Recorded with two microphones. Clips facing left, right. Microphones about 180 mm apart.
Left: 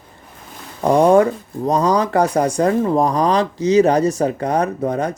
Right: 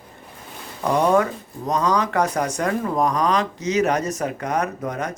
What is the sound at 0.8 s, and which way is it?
Speech, 30° left (ahead or behind).